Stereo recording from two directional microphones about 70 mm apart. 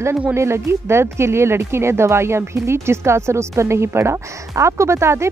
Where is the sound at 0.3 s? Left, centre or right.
Right.